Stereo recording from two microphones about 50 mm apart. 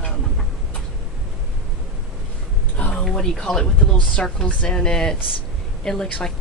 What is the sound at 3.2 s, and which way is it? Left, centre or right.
Speech, centre.